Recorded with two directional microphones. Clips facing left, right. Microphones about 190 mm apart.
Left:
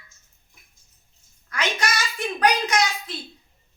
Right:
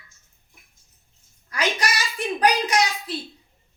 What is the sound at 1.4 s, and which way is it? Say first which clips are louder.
A child's voice: right 1 dB; 35° right (ahead or behind).